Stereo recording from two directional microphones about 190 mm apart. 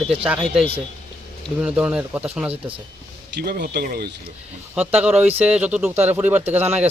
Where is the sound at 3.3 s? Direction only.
55° right (ahead or behind).